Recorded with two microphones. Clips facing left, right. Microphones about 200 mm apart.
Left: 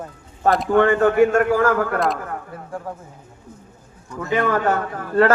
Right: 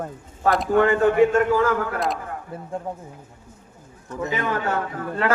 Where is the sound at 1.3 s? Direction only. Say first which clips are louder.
Left 2 dB; 50° left (ahead or behind).